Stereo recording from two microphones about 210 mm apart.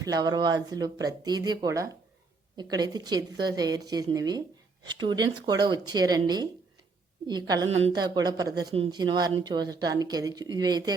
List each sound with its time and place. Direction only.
0.0 s speech: 15° right (ahead or behind)